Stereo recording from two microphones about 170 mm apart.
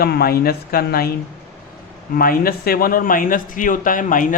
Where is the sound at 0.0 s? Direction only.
65° left (ahead or behind).